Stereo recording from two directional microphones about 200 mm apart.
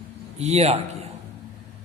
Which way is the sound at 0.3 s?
30° right (ahead or behind).